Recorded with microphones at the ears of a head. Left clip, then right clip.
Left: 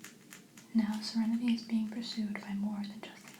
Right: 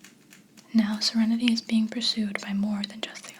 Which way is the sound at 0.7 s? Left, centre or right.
Right.